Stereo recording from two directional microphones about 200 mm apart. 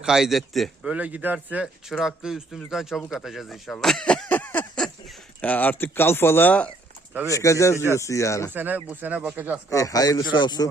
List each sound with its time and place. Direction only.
0.0 s a man's voice: centre (ahead or behind)
7.1 s speech: 10° right (ahead or behind)
7.3 s speech: 15° left (ahead or behind)
8.5 s speech: 10° right (ahead or behind)
9.6 s a man's voice: 15° left (ahead or behind)